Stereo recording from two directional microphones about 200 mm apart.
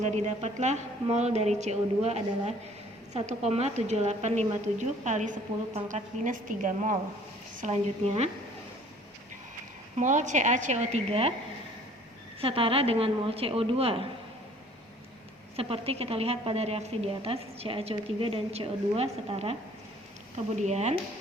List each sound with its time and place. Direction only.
0.0 s a woman's voice: 35° right (ahead or behind)
10.0 s a woman's voice: 40° right (ahead or behind)
12.4 s a woman's voice: 25° right (ahead or behind)
15.5 s a woman's voice: 30° right (ahead or behind)
20.6 s a woman's voice: 35° right (ahead or behind)